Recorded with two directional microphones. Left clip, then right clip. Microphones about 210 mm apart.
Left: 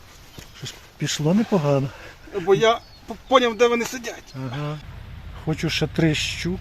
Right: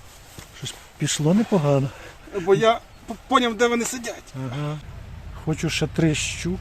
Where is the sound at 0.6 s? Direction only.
10° right (ahead or behind).